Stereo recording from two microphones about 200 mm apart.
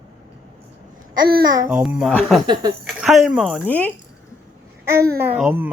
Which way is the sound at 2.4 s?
25° right (ahead or behind).